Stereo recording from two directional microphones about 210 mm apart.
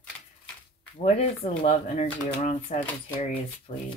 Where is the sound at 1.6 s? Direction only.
30° left (ahead or behind).